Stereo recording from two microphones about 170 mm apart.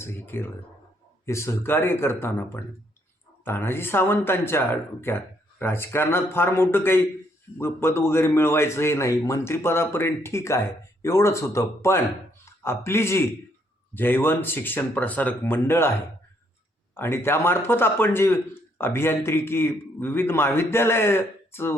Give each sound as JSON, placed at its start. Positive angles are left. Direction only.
{"t": 0.0, "sound": "a man's voice", "side_deg": 15}
{"t": 16.9, "sound": "a man's voice", "side_deg": 15}